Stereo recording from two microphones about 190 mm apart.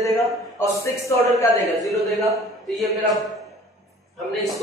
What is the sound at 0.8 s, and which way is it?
Speech, 15° left (ahead or behind).